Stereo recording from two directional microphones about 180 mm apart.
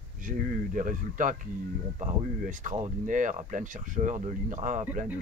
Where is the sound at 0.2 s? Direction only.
50° right (ahead or behind).